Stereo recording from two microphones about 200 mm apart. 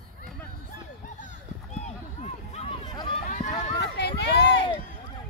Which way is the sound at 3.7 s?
60° left (ahead or behind).